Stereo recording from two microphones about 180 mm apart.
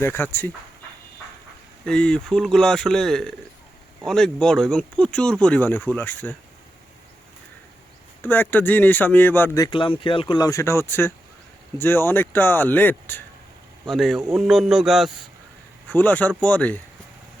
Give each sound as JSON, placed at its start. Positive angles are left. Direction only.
{"t": 0.0, "sound": "speech", "side_deg": 10}
{"t": 1.8, "sound": "speech", "side_deg": 5}
{"t": 8.2, "sound": "speech", "side_deg": 10}
{"t": 9.6, "sound": "speech", "side_deg": 30}
{"t": 13.8, "sound": "speech", "side_deg": 0}
{"t": 15.9, "sound": "speech", "side_deg": 10}